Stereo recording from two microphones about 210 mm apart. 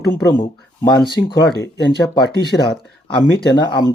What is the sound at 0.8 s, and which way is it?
Speech, 20° left (ahead or behind).